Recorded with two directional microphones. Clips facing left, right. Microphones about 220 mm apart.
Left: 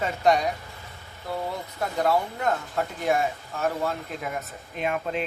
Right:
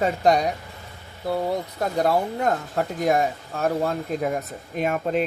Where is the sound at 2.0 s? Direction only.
40° right (ahead or behind).